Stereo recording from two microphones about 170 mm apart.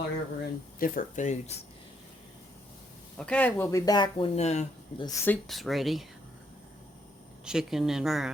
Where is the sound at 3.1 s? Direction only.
5° left (ahead or behind); by 4.7 s 40° left (ahead or behind).